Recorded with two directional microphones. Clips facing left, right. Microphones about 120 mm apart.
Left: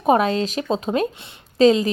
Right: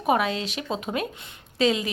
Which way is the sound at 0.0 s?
40° left (ahead or behind).